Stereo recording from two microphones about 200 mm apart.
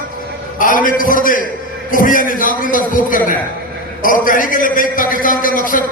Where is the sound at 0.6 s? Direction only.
45° left (ahead or behind).